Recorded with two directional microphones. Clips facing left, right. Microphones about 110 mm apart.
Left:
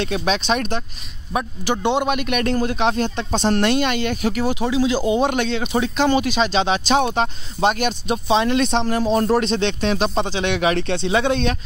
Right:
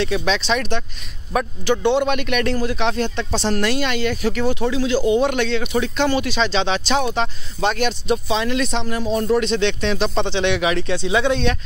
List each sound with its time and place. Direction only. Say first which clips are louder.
0.4 s speech: even; 50° left (ahead or behind)
1.3 s speech: right 2 dB; 15° left (ahead or behind)
2.4 s speech: left 1 dB; 45° left (ahead or behind)
2.7 s speech: left 2 dB; 25° left (ahead or behind)
3.0 s speech: left 1 dB; 45° left (ahead or behind)
3.5 s speech: left 3 dB; 20° left (ahead or behind)
8.8 s speech: left 2 dB; 35° left (ahead or behind)
9.9 s speech: even; 10° left (ahead or behind)
10.4 s speech: left 1 dB; 45° left (ahead or behind)
11.1 s speech: right 1 dB; 40° left (ahead or behind)